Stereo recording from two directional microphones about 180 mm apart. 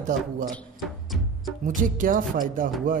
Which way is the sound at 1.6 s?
50° right (ahead or behind).